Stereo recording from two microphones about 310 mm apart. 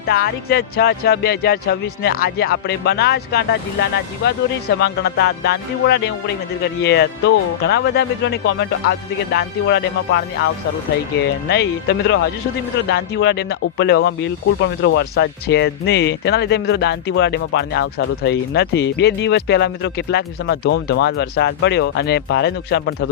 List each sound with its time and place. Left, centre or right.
0.0 s speech: left
4.8 s speech: left